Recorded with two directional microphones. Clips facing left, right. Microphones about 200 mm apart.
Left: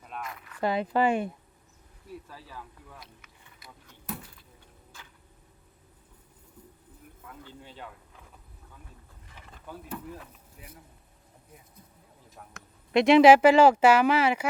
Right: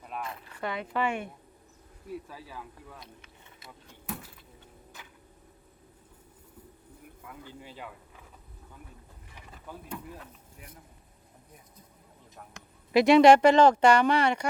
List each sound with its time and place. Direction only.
0.2 s speech: 30° right (ahead or behind)
0.6 s speech: 35° left (ahead or behind)
3.0 s vehicle: 25° right (ahead or behind)
4.9 s tick-tock: 20° right (ahead or behind)
7.3 s speech: 10° right (ahead or behind)
9.6 s speech: 5° left (ahead or behind)
12.9 s speech: centre (ahead or behind)